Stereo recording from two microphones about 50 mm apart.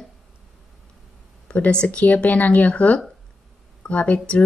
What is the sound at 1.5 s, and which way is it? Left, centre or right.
Speech, left.